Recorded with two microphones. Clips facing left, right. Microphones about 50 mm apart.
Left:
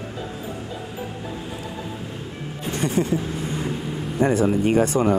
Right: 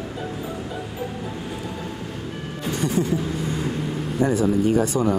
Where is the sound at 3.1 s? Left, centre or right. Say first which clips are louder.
Even; left.